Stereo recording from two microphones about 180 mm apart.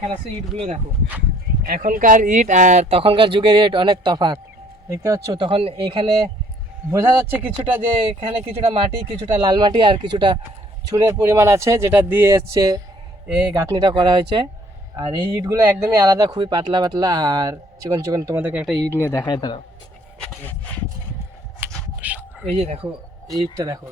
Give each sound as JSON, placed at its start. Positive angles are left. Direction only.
{"t": 0.5, "sound": "speech", "side_deg": -35}
{"t": 1.6, "sound": "speech", "side_deg": -50}
{"t": 6.9, "sound": "speech", "side_deg": -15}
{"t": 7.6, "sound": "speech", "side_deg": -30}
{"t": 18.9, "sound": "speech", "side_deg": 15}
{"t": 21.6, "sound": "shuffling cards", "side_deg": -10}
{"t": 22.0, "sound": "a sound", "side_deg": -10}
{"t": 22.5, "sound": "speech", "side_deg": -35}
{"t": 23.4, "sound": "speech", "side_deg": -20}